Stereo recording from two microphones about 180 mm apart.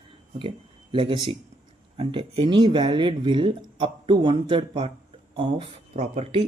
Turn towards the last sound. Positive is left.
turn(degrees=-35)  # may be behind; listen again after turning